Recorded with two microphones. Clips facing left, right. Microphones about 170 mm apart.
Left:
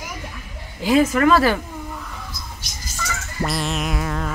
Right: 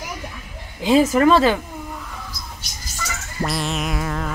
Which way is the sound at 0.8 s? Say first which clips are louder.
Right 1 dB; 30° right (ahead or behind).